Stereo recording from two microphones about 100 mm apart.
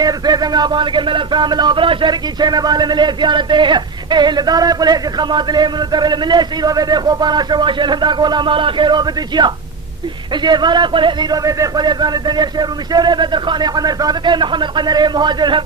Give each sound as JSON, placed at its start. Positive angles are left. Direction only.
{"t": 0.0, "sound": "speech", "side_deg": -40}
{"t": 11.4, "sound": "speech", "side_deg": -40}